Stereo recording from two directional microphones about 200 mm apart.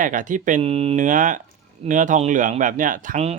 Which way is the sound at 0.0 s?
40° right (ahead or behind).